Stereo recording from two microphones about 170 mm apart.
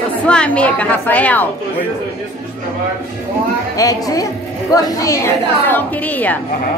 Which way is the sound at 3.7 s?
20° left (ahead or behind).